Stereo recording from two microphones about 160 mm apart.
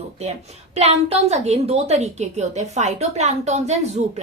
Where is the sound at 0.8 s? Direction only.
40° right (ahead or behind).